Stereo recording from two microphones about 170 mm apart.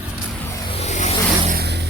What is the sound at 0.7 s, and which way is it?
Vehicle, 40° left (ahead or behind).